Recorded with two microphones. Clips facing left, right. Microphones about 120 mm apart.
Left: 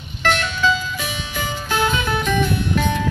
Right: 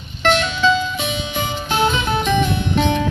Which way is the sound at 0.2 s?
20° right (ahead or behind).